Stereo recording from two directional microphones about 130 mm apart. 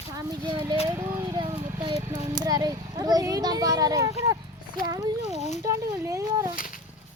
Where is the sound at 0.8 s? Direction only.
15° right (ahead or behind).